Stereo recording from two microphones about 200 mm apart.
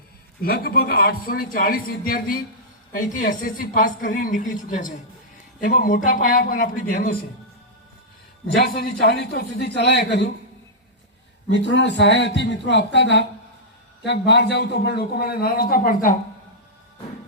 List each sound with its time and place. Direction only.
0.4 s a woman's voice: 50° left (ahead or behind)
8.5 s a man's voice: 55° left (ahead or behind)
11.5 s a man's voice: 60° left (ahead or behind); by 16.1 s 45° left (ahead or behind)